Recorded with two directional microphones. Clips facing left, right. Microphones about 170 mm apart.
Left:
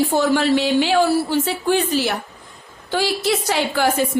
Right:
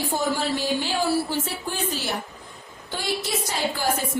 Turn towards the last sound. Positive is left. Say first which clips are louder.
# left 6 dB
turn(degrees=75)  # may be behind; listen again after turning